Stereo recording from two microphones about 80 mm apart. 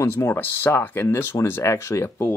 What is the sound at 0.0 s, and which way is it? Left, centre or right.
Speech, left.